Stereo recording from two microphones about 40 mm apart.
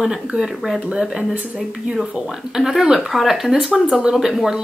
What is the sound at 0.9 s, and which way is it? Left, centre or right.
Speech, centre.